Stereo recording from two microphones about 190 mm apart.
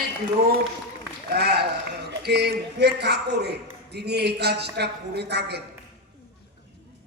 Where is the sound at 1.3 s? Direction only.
60° right (ahead or behind).